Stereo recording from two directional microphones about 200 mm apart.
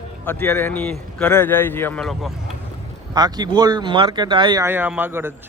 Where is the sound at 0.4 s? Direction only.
10° left (ahead or behind).